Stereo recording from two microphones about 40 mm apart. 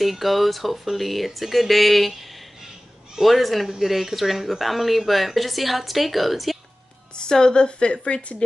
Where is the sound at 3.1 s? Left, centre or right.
Centre.